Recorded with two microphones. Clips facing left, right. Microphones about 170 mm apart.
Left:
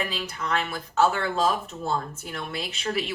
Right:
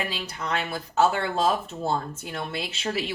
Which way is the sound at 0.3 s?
30° right (ahead or behind).